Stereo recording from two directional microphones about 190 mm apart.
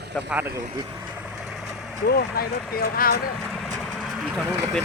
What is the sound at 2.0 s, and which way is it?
Speech, 50° left (ahead or behind).